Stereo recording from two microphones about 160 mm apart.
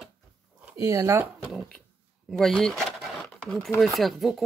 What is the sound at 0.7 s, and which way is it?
Speech, 20° right (ahead or behind).